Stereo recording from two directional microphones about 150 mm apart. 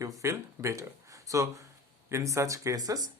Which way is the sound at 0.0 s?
20° right (ahead or behind).